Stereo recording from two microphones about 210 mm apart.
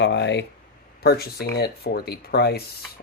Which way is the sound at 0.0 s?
55° left (ahead or behind).